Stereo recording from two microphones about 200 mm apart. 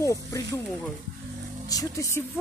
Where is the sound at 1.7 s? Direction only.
20° left (ahead or behind).